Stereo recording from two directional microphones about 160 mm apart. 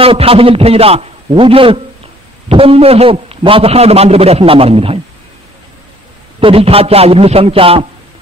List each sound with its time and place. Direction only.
0.0 s a man's voice: 35° right (ahead or behind)
6.4 s a man's voice: 35° right (ahead or behind)